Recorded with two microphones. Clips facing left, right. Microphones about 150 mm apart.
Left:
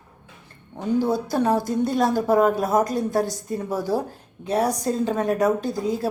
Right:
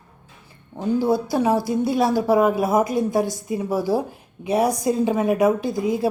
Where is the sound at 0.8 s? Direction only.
10° right (ahead or behind).